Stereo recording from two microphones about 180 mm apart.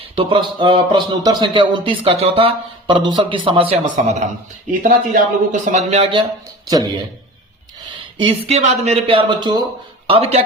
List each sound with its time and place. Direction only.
0.2 s a man's voice: 30° right (ahead or behind)
3.8 s speech: 40° right (ahead or behind)
7.9 s speech: 30° right (ahead or behind)